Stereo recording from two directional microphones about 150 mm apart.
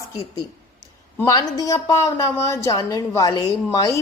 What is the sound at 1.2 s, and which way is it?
A woman's voice, 25° left (ahead or behind).